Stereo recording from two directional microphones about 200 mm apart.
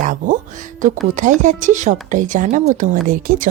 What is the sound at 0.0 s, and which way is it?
Music, 40° right (ahead or behind).